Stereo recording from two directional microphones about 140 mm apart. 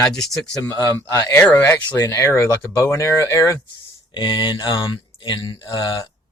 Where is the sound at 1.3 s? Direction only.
10° left (ahead or behind).